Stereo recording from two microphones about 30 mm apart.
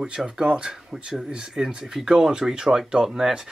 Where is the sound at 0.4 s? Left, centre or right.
Right.